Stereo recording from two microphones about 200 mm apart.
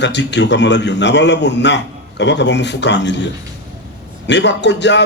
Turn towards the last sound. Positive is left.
turn(degrees=60)  # may be behind; listen again after turning